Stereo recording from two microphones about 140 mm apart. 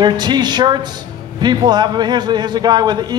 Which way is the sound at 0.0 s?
30° right (ahead or behind).